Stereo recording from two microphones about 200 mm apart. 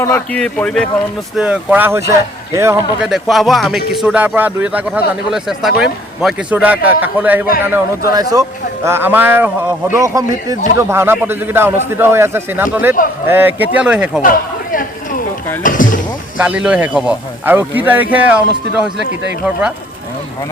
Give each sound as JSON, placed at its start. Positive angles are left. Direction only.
{"t": 0.0, "sound": "speech", "side_deg": 10}
{"t": 1.4, "sound": "speech", "side_deg": -5}
{"t": 3.1, "sound": "speech", "side_deg": 0}
{"t": 14.2, "sound": "speech", "side_deg": 45}
{"t": 16.4, "sound": "speech", "side_deg": -5}